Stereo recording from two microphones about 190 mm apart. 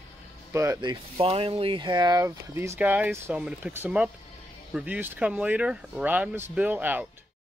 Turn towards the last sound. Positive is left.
turn(degrees=-10)  # may be behind; listen again after turning